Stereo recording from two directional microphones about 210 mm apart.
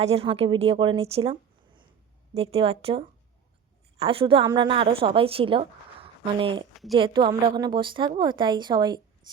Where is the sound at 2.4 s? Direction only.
30° right (ahead or behind).